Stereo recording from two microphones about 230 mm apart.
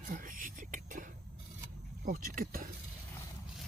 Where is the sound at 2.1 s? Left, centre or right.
Right.